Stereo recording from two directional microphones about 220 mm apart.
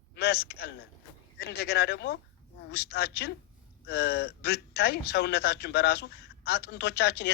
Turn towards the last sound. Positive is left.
turn(degrees=45)  # may be behind; listen again after turning